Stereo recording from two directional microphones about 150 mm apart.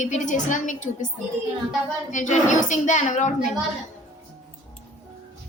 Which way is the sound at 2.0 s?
55° left (ahead or behind).